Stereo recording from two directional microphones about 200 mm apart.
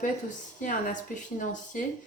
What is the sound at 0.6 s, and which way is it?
Speech, 40° left (ahead or behind).